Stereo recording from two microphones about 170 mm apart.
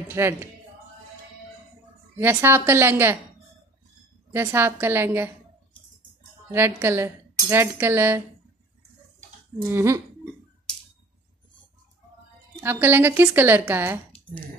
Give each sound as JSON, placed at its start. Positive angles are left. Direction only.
{"t": 0.1, "sound": "speech", "side_deg": -15}
{"t": 2.1, "sound": "speech", "side_deg": -15}
{"t": 4.3, "sound": "speech", "side_deg": -15}
{"t": 6.5, "sound": "speech", "side_deg": -15}
{"t": 9.7, "sound": "speech", "side_deg": -15}
{"t": 12.5, "sound": "speech", "side_deg": -15}